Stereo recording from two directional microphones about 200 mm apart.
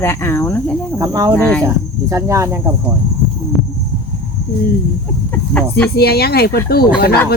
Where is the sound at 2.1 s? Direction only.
15° right (ahead or behind).